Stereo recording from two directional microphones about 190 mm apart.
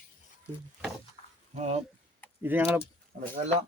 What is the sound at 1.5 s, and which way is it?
Speech, 35° right (ahead or behind).